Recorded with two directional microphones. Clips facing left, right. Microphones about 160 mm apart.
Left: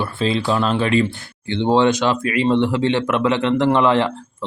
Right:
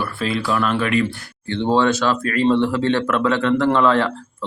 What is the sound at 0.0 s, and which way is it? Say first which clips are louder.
Speech: left 2 dB; 25° left (ahead or behind).